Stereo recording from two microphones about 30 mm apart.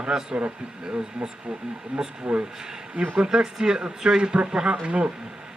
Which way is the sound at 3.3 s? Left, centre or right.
Right.